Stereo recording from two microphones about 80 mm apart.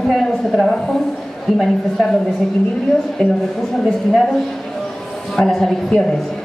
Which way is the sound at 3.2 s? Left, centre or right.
Centre.